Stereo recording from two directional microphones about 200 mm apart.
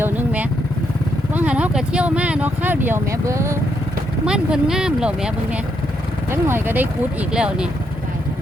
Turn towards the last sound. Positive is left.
turn(degrees=-5)  # may be behind; listen again after turning